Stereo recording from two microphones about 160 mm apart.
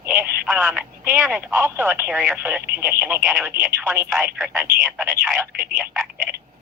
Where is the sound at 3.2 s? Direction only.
Centre (ahead or behind).